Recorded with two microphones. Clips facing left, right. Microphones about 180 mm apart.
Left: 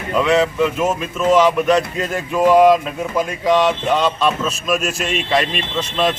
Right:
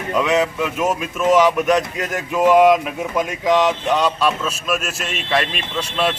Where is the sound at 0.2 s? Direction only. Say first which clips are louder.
Left 3 dB; 10° right (ahead or behind).